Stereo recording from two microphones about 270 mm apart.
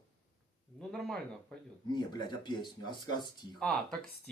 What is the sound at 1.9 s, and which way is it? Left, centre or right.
A man's voice, centre.